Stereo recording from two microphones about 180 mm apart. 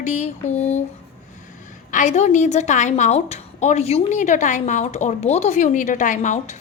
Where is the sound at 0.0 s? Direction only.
40° left (ahead or behind).